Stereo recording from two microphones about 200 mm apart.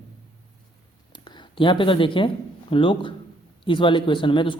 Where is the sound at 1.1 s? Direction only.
20° left (ahead or behind).